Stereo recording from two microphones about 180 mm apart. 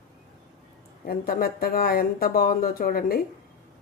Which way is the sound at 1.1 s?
55° left (ahead or behind).